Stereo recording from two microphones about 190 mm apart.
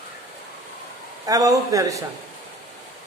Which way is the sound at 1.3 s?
20° right (ahead or behind).